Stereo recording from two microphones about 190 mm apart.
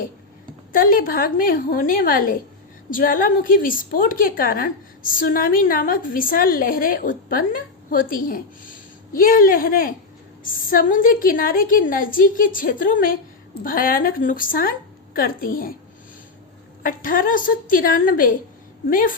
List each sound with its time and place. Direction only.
0.7 s a woman's voice: 50° left (ahead or behind)
16.8 s a woman's voice: 45° left (ahead or behind)